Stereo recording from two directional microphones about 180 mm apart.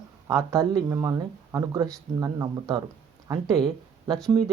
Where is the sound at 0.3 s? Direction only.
20° right (ahead or behind).